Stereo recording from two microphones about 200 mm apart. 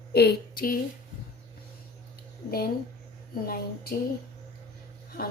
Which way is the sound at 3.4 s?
50° left (ahead or behind).